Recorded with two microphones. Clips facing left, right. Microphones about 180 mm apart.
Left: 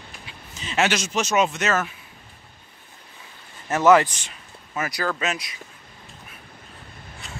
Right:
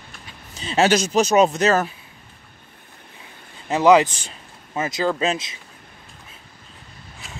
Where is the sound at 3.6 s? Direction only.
15° right (ahead or behind).